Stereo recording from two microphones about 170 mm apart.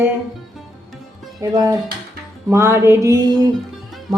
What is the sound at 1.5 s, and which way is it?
A woman's voice, 20° right (ahead or behind).